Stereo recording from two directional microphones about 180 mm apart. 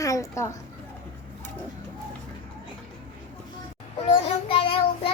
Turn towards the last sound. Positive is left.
turn(degrees=30)  # may be behind; listen again after turning